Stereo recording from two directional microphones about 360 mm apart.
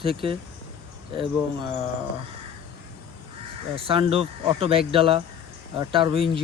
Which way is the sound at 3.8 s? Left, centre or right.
Centre.